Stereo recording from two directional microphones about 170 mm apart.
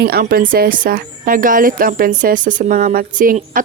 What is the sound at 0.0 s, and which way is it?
Speech, 65° right (ahead or behind).